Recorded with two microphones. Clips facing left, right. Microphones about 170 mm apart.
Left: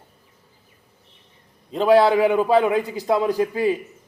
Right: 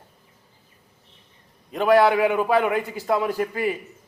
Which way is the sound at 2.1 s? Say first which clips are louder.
Left 3 dB; 10° left (ahead or behind).